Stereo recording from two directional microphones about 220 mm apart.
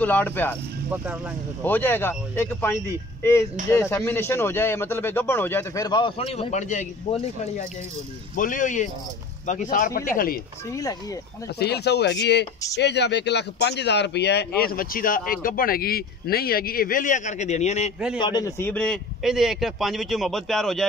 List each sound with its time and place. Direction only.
0.0 s a man's voice: 5° left (ahead or behind)
1.6 s a man's voice: 10° left (ahead or behind); by 10.4 s 40° left (ahead or behind)
10.7 s a man's voice: 15° left (ahead or behind)
11.5 s speech: 50° left (ahead or behind); by 17.9 s 30° left (ahead or behind)
18.2 s a man's voice: 15° left (ahead or behind); by 20.8 s centre (ahead or behind)